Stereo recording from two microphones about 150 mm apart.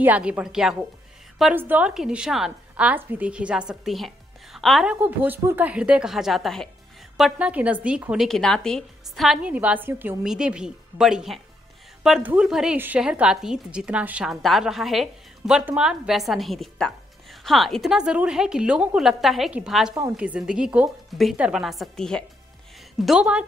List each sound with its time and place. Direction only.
0.0 s a woman's voice: 10° right (ahead or behind)
4.9 s a woman's voice: 10° right (ahead or behind)
19.9 s a woman's voice: 25° right (ahead or behind)
20.2 s a woman's voice: 5° right (ahead or behind)